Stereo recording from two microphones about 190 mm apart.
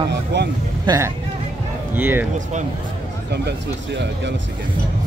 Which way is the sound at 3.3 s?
65° right (ahead or behind).